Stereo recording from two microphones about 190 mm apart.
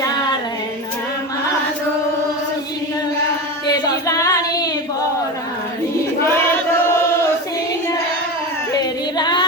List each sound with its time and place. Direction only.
4.0 s female singing: 15° left (ahead or behind)
8.8 s singing: 20° left (ahead or behind)